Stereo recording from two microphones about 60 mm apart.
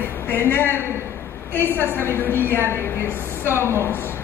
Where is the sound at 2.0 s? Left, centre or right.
Left.